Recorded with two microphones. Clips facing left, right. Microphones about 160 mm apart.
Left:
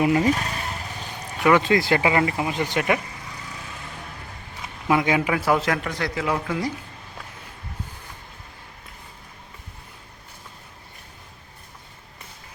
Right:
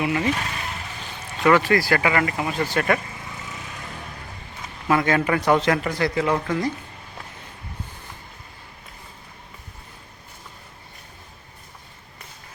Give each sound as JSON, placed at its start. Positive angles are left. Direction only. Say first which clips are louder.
{"t": 0.0, "sound": "speech", "louder": "left 4 dB", "side_deg": 40}
{"t": 1.4, "sound": "speech", "louder": "even", "side_deg": 15}
{"t": 4.9, "sound": "a man's voice", "louder": "right 1 dB", "side_deg": 10}